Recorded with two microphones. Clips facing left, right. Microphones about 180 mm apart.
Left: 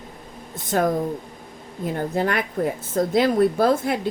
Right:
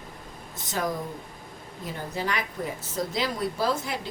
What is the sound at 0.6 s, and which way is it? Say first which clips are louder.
A woman's voice: left 9 dB; 55° left (ahead or behind).